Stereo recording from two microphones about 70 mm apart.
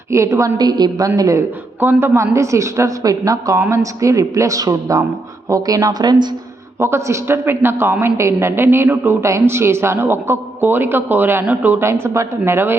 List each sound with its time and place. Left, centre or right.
0.1 s speech: right
0.5 s a woman's voice: right
1.8 s a woman's voice: right
6.7 s a man's voice: right
11.8 s a man's voice: right